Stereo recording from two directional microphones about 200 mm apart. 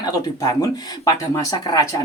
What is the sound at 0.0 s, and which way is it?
Speech, 15° left (ahead or behind).